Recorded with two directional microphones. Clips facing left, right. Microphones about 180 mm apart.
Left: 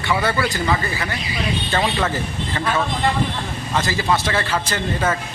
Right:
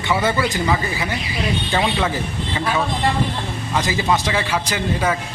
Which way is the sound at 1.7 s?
5° right (ahead or behind).